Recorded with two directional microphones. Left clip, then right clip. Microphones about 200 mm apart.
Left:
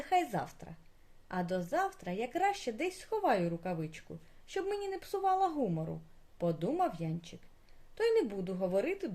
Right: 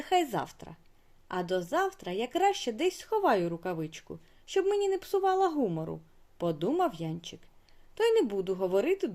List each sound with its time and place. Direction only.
0.0 s speech: 40° right (ahead or behind)